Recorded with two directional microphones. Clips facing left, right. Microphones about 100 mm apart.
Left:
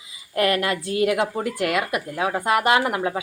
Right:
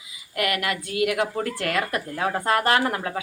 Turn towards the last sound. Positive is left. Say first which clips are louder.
# left 2 dB
turn(degrees=15)  # may be behind; listen again after turning